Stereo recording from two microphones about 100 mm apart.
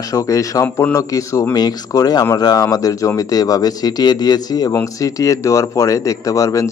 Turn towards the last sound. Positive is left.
turn(degrees=35)  # may be behind; listen again after turning